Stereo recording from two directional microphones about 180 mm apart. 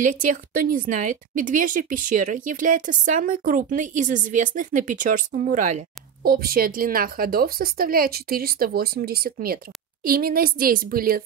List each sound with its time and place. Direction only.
0.0 s a woman's voice: 45° right (ahead or behind)
6.2 s a woman's voice: 55° right (ahead or behind)